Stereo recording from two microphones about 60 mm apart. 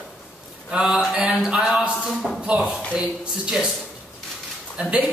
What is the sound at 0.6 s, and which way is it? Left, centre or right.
A man's voice, centre.